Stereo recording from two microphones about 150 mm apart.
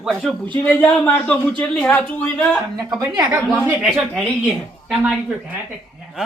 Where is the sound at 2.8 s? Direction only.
25° right (ahead or behind).